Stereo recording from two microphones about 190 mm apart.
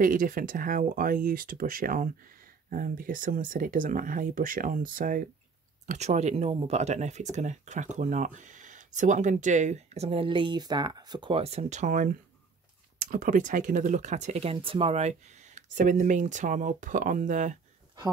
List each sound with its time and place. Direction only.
0.0 s speech: 45° right (ahead or behind)
5.9 s speech: 35° right (ahead or behind)